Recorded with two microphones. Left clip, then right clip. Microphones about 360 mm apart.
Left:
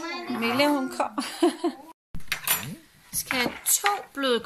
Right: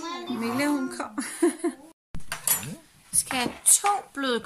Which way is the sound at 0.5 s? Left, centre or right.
Centre.